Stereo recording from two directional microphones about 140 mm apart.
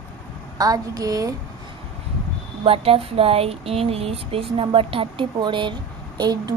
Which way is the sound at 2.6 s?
45° right (ahead or behind).